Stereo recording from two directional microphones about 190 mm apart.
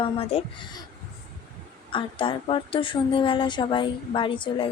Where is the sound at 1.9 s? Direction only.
25° left (ahead or behind).